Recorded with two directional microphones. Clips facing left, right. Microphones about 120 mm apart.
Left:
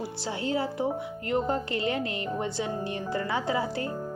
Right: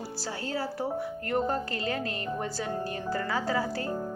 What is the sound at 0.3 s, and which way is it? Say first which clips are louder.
Speech: left 4 dB; 20° left (ahead or behind).